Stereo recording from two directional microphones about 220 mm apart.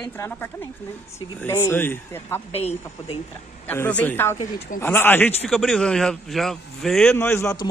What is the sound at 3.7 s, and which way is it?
Speech, 5° left (ahead or behind).